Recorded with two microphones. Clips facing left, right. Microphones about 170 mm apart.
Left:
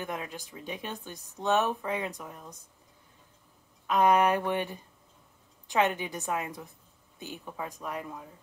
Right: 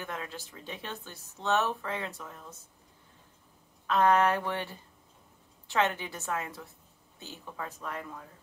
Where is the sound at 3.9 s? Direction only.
15° left (ahead or behind).